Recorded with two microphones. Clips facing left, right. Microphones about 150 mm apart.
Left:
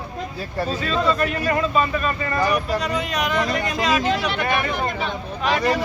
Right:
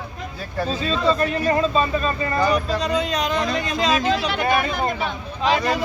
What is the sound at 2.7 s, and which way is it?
Speech, 5° left (ahead or behind).